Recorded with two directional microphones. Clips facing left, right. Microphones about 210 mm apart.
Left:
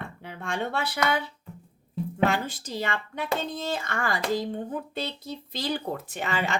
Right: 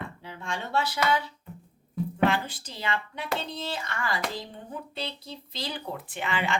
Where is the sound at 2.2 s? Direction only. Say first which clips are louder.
Even; 45° left (ahead or behind).